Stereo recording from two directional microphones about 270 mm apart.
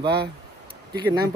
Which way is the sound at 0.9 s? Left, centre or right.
Centre.